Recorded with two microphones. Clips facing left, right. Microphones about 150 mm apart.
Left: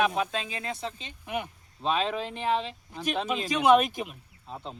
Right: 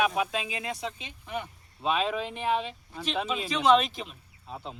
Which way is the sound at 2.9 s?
10° left (ahead or behind).